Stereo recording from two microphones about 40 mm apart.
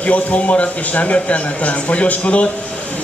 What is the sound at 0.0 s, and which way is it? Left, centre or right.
A man's voice, left.